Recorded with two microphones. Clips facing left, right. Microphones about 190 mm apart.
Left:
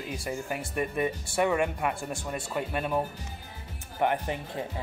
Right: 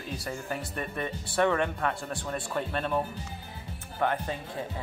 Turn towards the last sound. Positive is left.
turn(degrees=15)  # may be behind; listen again after turning